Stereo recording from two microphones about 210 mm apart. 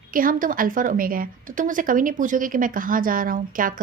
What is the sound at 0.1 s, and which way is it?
Speech, 40° right (ahead or behind).